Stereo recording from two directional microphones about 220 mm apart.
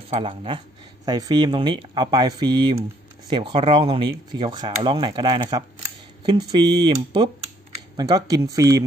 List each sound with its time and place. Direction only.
0.1 s speech: 25° right (ahead or behind)